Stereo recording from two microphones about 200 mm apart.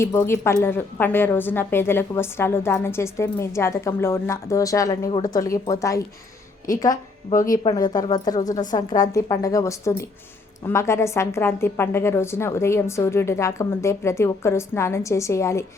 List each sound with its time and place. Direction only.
0.0 s a woman's voice: 10° left (ahead or behind)
7.3 s speech: 45° left (ahead or behind)
7.6 s a woman's voice: 20° left (ahead or behind)